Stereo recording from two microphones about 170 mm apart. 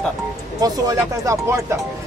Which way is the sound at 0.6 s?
20° right (ahead or behind).